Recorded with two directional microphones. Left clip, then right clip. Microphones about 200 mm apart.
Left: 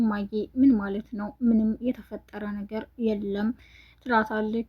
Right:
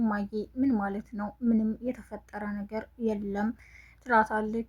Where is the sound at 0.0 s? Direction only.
30° left (ahead or behind).